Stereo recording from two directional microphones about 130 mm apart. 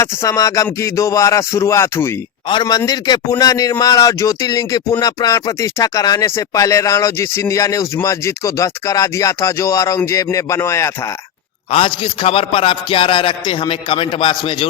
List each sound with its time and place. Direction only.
0.0 s a man's voice: 25° left (ahead or behind)
2.5 s a man's voice: 35° left (ahead or behind)
11.7 s music: 45° left (ahead or behind)